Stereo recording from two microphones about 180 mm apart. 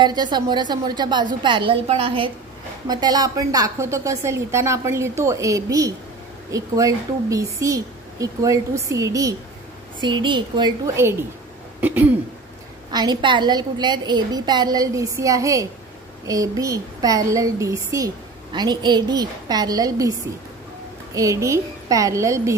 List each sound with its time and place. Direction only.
0.0 s a woman's voice: 25° right (ahead or behind)
11.8 s throat clearing: 10° right (ahead or behind)
12.9 s a woman's voice: 25° right (ahead or behind)